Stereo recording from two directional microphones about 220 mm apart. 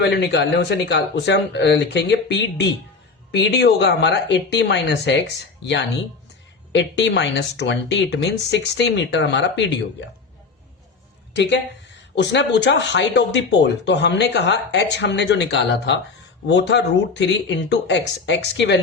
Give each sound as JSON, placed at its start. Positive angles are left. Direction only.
{"t": 0.0, "sound": "speech", "side_deg": 50}
{"t": 12.1, "sound": "speech", "side_deg": 55}